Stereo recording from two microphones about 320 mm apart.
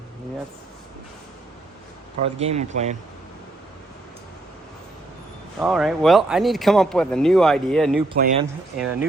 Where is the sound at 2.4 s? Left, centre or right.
Centre.